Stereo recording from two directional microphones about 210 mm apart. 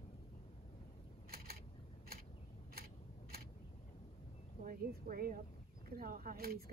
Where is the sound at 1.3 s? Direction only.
45° right (ahead or behind).